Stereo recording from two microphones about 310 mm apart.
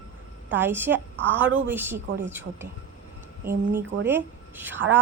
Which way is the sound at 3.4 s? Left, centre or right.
Centre.